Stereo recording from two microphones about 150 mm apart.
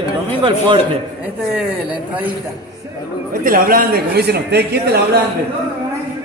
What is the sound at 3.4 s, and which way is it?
A man's voice, 75° right (ahead or behind).